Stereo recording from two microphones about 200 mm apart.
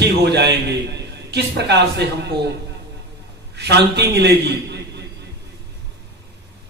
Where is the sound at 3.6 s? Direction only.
55° right (ahead or behind).